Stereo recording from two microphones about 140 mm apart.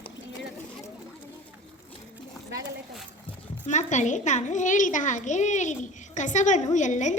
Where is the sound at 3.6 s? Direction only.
60° left (ahead or behind).